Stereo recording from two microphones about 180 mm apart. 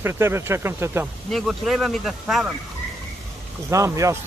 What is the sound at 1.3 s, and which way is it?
Speech, centre (ahead or behind).